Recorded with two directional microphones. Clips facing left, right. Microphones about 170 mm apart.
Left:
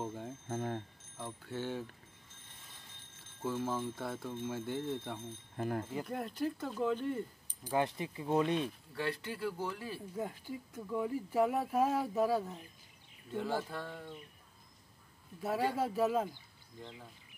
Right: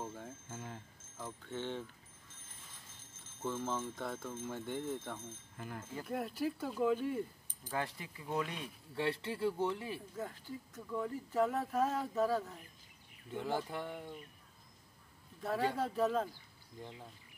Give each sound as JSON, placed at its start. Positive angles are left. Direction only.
{"t": 0.0, "sound": "bicycle bell", "side_deg": 15}
{"t": 0.5, "sound": "speech", "side_deg": 55}
{"t": 1.2, "sound": "speech", "side_deg": 5}
{"t": 3.3, "sound": "speech", "side_deg": 0}
{"t": 5.6, "sound": "speech", "side_deg": 50}
{"t": 6.0, "sound": "speech", "side_deg": -5}
{"t": 7.6, "sound": "speech", "side_deg": 20}
{"t": 8.9, "sound": "speech", "side_deg": -25}
{"t": 10.1, "sound": "speech", "side_deg": 15}
{"t": 13.3, "sound": "a sound", "side_deg": -15}
{"t": 15.4, "sound": "speech", "side_deg": 5}